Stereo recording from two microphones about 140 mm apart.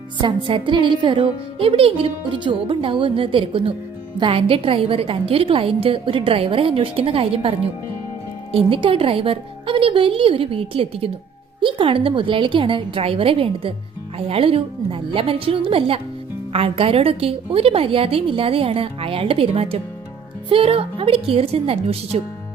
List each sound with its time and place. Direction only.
0.2 s a woman's voice: 35° right (ahead or behind)
8.5 s a woman's voice: 40° right (ahead or behind)